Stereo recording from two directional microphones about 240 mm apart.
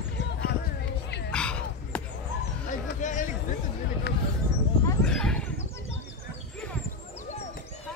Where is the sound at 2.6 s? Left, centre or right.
Left.